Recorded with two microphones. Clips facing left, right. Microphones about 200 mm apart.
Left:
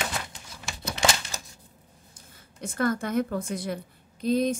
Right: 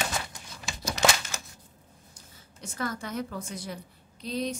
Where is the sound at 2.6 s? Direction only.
55° left (ahead or behind).